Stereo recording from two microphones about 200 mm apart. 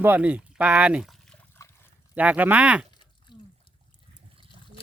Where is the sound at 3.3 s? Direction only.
20° left (ahead or behind).